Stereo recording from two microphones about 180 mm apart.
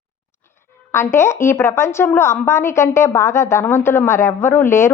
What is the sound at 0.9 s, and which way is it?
A woman's voice, 15° left (ahead or behind).